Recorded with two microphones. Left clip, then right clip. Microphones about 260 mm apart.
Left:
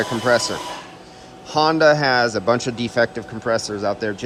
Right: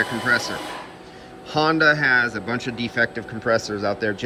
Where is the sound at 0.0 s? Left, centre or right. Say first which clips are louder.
Left 3 dB; centre.